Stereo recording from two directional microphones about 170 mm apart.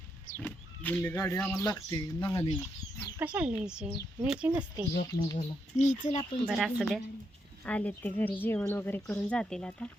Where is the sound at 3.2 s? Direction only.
10° right (ahead or behind).